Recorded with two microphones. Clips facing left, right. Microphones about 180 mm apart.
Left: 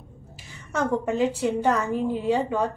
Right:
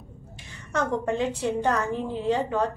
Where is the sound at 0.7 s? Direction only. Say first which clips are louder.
Left 2 dB; 10° left (ahead or behind).